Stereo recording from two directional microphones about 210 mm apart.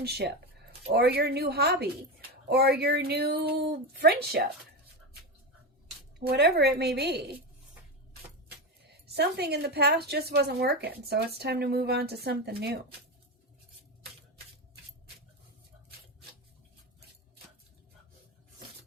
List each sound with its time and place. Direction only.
0.0 s a woman's voice: 50° right (ahead or behind)
6.1 s a woman's voice: 50° right (ahead or behind)
9.1 s a woman's voice: 50° right (ahead or behind)